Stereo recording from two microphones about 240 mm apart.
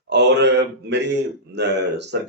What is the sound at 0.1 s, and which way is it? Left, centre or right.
Speech, right.